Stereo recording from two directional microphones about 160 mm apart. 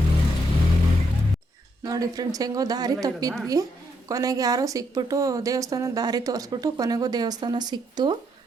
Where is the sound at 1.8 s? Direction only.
25° right (ahead or behind).